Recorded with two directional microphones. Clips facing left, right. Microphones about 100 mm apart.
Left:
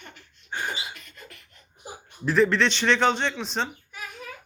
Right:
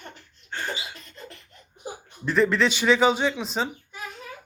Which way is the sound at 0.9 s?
30° right (ahead or behind).